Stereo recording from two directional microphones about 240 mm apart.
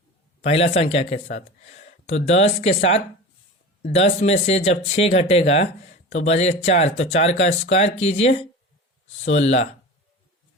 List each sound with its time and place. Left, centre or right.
0.4 s speech: left